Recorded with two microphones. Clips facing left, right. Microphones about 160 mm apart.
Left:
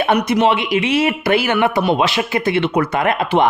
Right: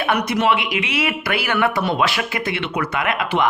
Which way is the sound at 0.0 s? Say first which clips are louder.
Left 4 dB; 25° left (ahead or behind).